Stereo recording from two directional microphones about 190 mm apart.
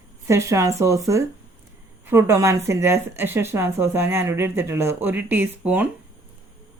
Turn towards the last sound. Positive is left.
turn(degrees=-10)  # may be behind; listen again after turning